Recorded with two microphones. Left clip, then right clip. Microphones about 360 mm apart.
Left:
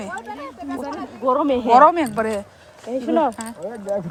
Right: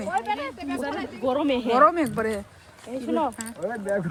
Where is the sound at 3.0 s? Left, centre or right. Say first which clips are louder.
Left 6 dB; left.